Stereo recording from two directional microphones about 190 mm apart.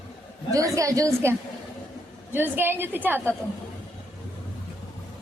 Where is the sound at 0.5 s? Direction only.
15° right (ahead or behind).